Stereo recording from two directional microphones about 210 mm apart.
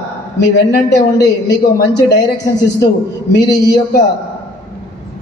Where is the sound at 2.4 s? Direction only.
15° left (ahead or behind).